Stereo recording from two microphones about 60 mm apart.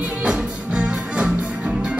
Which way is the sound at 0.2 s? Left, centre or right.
Centre.